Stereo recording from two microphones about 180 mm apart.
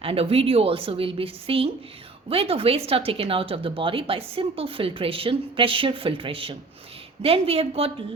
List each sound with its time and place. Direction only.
0.0 s speech: 30° right (ahead or behind)